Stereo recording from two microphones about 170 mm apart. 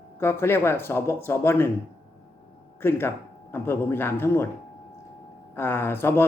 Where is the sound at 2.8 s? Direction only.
15° left (ahead or behind).